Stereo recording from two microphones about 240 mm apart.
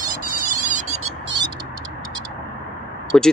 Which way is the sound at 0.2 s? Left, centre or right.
Right.